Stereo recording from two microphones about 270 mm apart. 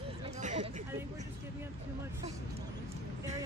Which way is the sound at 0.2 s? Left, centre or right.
Right.